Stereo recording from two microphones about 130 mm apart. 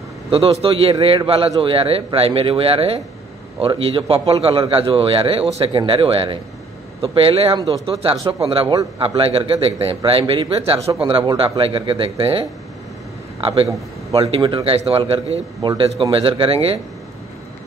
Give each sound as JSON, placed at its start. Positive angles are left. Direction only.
{"t": 0.3, "sound": "a man's voice", "side_deg": -50}